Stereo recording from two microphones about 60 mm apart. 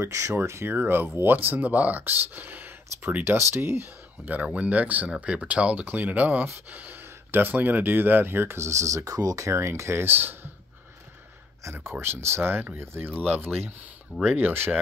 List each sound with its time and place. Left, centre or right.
0.0 s speech: right
0.7 s speech: right
9.5 s speech: right
11.7 s speech: right